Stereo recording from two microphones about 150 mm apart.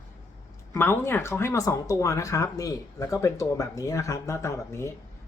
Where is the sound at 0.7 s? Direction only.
15° left (ahead or behind).